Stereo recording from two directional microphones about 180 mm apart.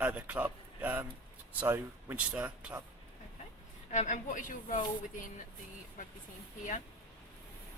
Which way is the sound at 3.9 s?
40° left (ahead or behind).